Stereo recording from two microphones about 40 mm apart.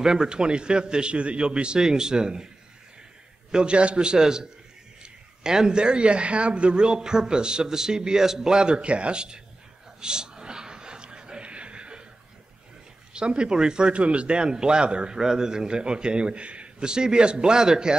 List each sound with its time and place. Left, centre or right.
0.0 s speech: centre
3.5 s speech: right
9.9 s a sound: centre
13.1 s speech: right